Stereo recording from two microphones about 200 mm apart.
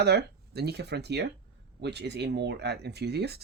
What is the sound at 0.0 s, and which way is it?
Speech, 55° right (ahead or behind).